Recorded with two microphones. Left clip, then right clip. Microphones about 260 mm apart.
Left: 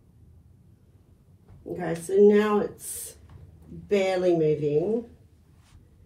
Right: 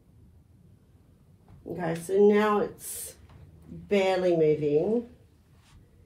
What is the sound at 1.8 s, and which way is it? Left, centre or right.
Speech, right.